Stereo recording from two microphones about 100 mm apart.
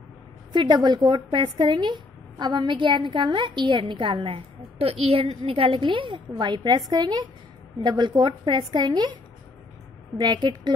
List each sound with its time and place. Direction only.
0.5 s a woman's voice: 45° right (ahead or behind)
10.1 s a woman's voice: 45° right (ahead or behind)